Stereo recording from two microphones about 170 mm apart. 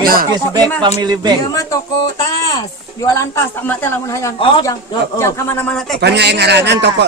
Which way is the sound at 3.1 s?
15° left (ahead or behind).